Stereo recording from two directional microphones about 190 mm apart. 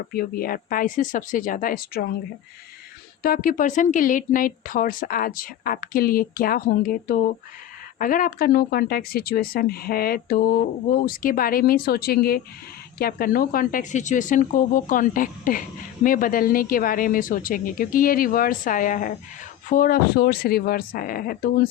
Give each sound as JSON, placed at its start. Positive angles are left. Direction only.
{"t": 0.1, "sound": "speech", "side_deg": 50}
{"t": 3.2, "sound": "speech", "side_deg": 50}